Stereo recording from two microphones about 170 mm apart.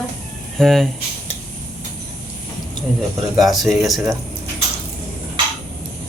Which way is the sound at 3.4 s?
Centre (ahead or behind).